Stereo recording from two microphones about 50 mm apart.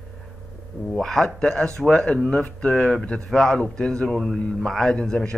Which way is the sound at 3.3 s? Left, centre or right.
Centre.